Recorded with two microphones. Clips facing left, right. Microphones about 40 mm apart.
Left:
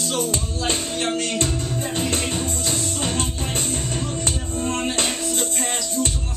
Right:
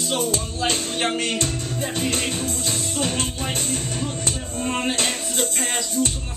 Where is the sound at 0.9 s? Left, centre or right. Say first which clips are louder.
Right 1 dB; right.